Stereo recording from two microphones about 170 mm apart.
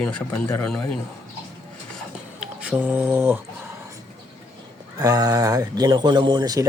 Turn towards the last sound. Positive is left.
turn(degrees=-20)  # may be behind; listen again after turning